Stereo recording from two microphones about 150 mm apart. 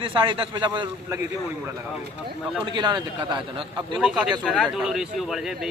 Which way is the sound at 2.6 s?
30° right (ahead or behind).